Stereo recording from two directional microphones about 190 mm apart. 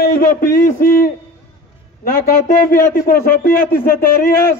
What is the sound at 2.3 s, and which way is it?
A man's voice, 50° left (ahead or behind).